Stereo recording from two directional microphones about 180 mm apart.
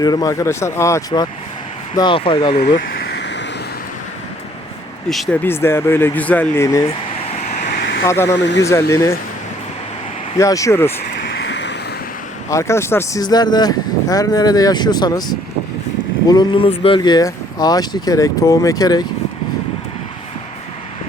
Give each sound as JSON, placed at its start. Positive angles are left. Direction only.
{"t": 0.0, "sound": "speech", "side_deg": 20}
{"t": 2.7, "sound": "a sound", "side_deg": 75}
{"t": 5.0, "sound": "speech", "side_deg": 0}
{"t": 5.4, "sound": "speech", "side_deg": 10}
{"t": 7.3, "sound": "vehicle", "side_deg": 40}
{"t": 7.8, "sound": "vehicle", "side_deg": 75}
{"t": 8.0, "sound": "speech", "side_deg": 15}
{"t": 10.3, "sound": "speech", "side_deg": 15}
{"t": 11.4, "sound": "vehicle", "side_deg": 80}
{"t": 12.5, "sound": "speech", "side_deg": 15}